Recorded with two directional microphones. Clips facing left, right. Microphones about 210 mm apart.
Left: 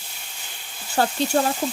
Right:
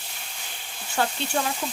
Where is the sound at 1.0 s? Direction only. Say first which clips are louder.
Left 5 dB; 40° left (ahead or behind).